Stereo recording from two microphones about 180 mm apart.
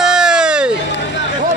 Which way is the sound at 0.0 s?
5° right (ahead or behind).